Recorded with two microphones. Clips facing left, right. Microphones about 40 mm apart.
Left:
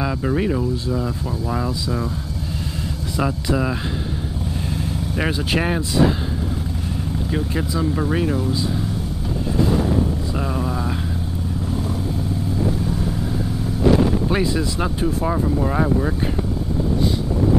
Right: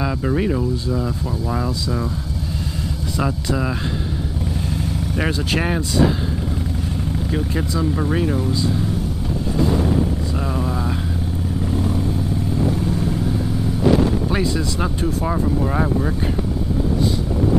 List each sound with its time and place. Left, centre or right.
0.0 s speech: centre
3.2 s speech: centre
5.1 s speech: centre
7.2 s speech: centre
10.4 s speech: centre
14.3 s speech: centre